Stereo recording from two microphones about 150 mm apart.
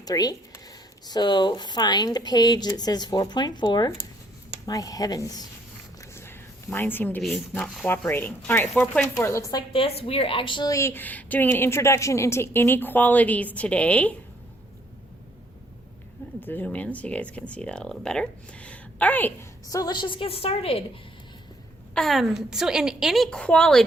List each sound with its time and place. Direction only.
0.0 s speech: 25° left (ahead or behind)
6.0 s a sound: 15° left (ahead or behind)
7.2 s a woman's voice: centre (ahead or behind)
8.0 s a woman's voice: 15° left (ahead or behind)
9.1 s speech: 20° left (ahead or behind)
9.8 s a woman's voice: 40° left (ahead or behind); by 14.1 s 10° left (ahead or behind)
16.4 s a woman's voice: 10° left (ahead or behind)
19.7 s a woman's voice: 25° left (ahead or behind)
21.9 s a woman's voice: centre (ahead or behind)